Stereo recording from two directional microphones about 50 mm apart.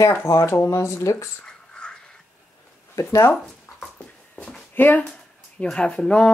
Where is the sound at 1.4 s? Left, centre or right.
Centre.